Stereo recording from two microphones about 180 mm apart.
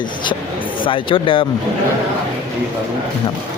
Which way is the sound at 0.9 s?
30° left (ahead or behind).